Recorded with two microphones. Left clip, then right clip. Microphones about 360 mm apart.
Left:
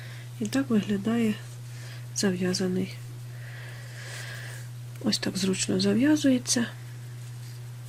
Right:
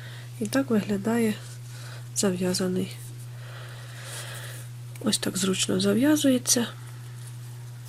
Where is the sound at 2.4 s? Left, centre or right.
Centre.